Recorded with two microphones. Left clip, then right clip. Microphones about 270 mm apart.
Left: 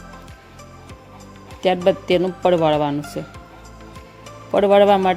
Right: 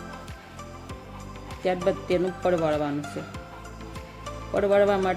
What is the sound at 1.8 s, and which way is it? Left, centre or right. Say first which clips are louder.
Speech: left 7 dB; left.